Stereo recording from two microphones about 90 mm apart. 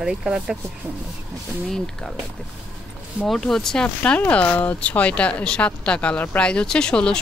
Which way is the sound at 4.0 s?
15° left (ahead or behind).